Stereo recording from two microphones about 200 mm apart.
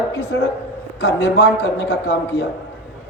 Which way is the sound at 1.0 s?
55° left (ahead or behind).